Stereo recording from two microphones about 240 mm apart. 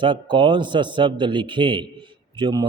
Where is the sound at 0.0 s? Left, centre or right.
Centre.